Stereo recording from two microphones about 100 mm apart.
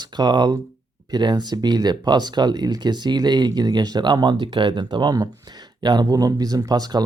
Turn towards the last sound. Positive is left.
turn(degrees=-40)  # may be behind; listen again after turning